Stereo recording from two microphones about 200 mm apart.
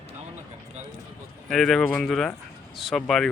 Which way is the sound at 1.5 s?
Centre (ahead or behind).